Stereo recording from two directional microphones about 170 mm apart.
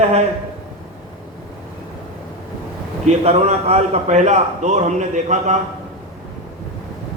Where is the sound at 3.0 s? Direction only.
40° right (ahead or behind).